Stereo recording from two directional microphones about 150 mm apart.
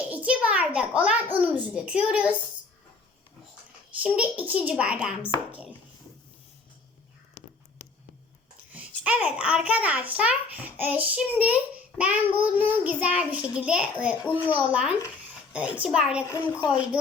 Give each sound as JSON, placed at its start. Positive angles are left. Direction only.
{"t": 0.1, "sound": "a child's voice", "side_deg": -10}
{"t": 4.0, "sound": "a child's voice", "side_deg": -10}
{"t": 7.4, "sound": "whispering", "side_deg": 70}
{"t": 7.8, "sound": "a sound", "side_deg": 70}
{"t": 8.7, "sound": "a child's voice", "side_deg": -10}